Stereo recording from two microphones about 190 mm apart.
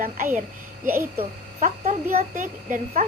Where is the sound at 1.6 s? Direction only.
45° right (ahead or behind).